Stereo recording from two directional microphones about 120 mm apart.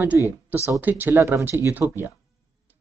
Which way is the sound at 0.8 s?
15° right (ahead or behind).